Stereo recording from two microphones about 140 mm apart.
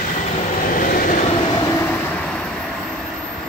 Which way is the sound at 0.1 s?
60° left (ahead or behind).